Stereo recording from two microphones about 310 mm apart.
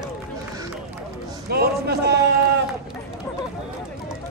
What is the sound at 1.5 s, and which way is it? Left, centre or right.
Speech, right.